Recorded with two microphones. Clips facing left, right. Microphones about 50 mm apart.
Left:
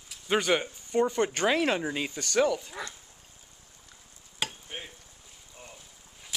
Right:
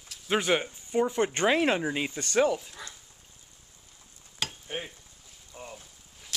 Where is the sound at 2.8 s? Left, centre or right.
Left.